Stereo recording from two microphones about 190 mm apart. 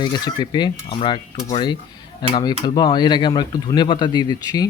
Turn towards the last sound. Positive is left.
turn(degrees=20)  # may be behind; listen again after turning